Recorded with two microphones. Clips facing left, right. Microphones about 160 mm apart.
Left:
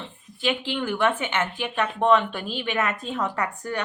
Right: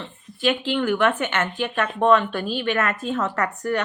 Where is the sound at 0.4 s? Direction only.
15° left (ahead or behind).